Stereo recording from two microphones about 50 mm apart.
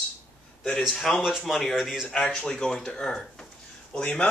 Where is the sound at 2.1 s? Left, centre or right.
Centre.